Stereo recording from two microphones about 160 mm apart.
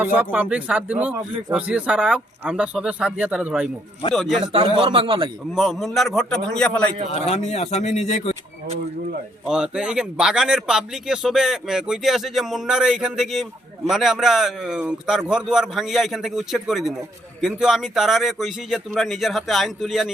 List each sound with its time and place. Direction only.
0.0 s speech: 10° right (ahead or behind)
4.5 s a man's voice: 35° right (ahead or behind)
5.5 s speech: centre (ahead or behind)
7.1 s speech: 40° left (ahead or behind)
9.5 s speech: 5° right (ahead or behind)